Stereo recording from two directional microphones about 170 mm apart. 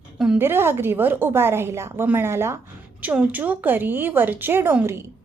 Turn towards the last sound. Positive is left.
turn(degrees=-15)  # may be behind; listen again after turning